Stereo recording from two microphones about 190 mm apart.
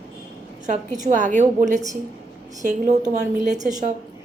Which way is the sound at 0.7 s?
40° right (ahead or behind).